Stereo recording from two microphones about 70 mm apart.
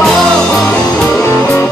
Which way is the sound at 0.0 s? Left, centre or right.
Centre.